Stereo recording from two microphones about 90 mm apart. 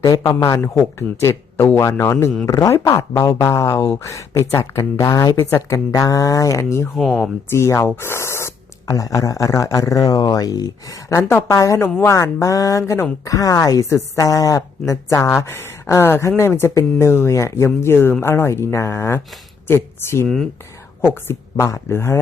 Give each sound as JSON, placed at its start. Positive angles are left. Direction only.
{"t": 0.0, "sound": "a man's voice", "side_deg": 40}
{"t": 2.5, "sound": "speech", "side_deg": 40}
{"t": 6.9, "sound": "speech", "side_deg": 0}
{"t": 7.5, "sound": "speech", "side_deg": 35}
{"t": 8.9, "sound": "speech", "side_deg": 40}
{"t": 20.2, "sound": "speech", "side_deg": 5}
{"t": 21.0, "sound": "speech", "side_deg": 25}